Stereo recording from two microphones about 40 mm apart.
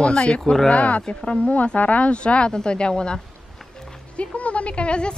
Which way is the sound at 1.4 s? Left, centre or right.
Left.